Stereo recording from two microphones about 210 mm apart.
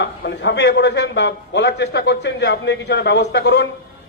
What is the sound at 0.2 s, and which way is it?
A man's voice, 55° left (ahead or behind).